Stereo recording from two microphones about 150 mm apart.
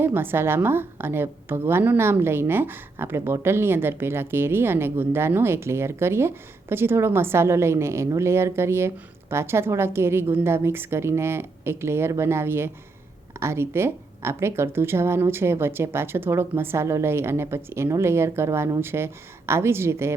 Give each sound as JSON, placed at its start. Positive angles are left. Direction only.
{"t": 0.0, "sound": "a woman's voice", "side_deg": -15}